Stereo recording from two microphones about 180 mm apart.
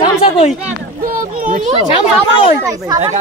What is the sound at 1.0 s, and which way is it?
Speech, 50° right (ahead or behind).